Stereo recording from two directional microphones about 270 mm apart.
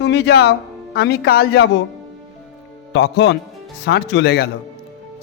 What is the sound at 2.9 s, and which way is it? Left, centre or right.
Speech, left.